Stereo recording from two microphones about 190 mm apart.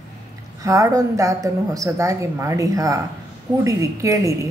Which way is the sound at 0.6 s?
15° right (ahead or behind).